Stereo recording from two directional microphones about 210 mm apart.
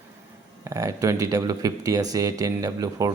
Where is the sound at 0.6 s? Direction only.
15° right (ahead or behind).